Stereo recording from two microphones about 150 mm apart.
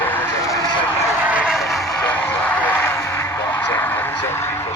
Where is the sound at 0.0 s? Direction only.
15° left (ahead or behind).